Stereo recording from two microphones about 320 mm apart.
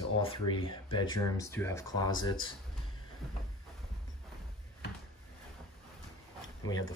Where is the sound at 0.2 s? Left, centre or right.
Centre.